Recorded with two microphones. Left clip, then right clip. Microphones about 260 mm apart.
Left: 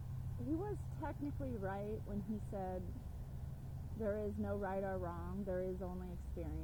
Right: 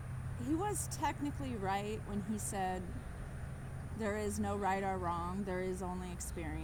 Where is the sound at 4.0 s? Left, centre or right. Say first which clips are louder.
Right 3 dB; right.